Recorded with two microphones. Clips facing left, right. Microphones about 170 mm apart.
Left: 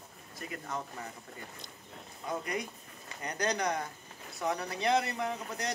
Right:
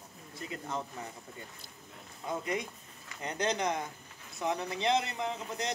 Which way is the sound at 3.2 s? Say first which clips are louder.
Right 1 dB; 25° right (ahead or behind).